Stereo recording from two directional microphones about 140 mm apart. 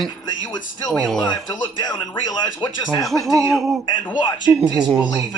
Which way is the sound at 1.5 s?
25° left (ahead or behind).